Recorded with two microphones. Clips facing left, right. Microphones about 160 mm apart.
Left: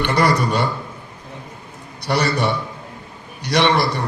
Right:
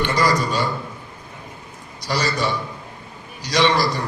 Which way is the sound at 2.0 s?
60° left (ahead or behind).